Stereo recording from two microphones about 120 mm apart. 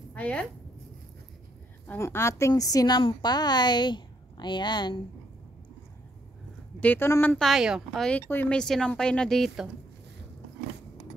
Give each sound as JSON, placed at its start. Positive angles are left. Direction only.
{"t": 0.1, "sound": "speech", "side_deg": 10}
{"t": 1.9, "sound": "a woman's voice", "side_deg": 20}
{"t": 6.8, "sound": "a woman's voice", "side_deg": 15}
{"t": 7.3, "sound": "speech", "side_deg": 0}
{"t": 8.3, "sound": "a woman's voice", "side_deg": 15}
{"t": 8.5, "sound": "speech", "side_deg": 5}